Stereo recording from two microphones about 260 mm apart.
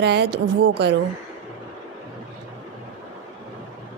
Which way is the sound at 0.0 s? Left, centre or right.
Right.